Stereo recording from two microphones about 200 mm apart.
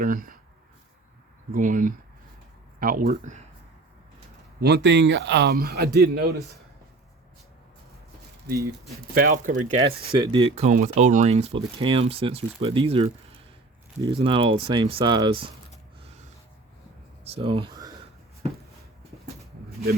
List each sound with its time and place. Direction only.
0.0 s speech: 45° right (ahead or behind)
1.5 s speech: 40° right (ahead or behind)
4.6 s a man's voice: 60° right (ahead or behind)
9.1 s speech: 40° right (ahead or behind); by 15.5 s 25° right (ahead or behind)
17.2 s speech: 30° right (ahead or behind)